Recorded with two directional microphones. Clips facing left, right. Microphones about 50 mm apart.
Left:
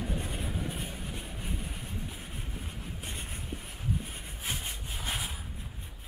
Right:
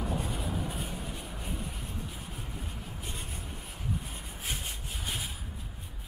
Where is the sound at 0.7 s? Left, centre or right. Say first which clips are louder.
Even; centre.